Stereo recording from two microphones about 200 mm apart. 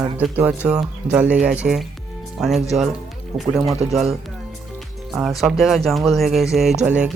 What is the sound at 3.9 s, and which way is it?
Speech, centre (ahead or behind).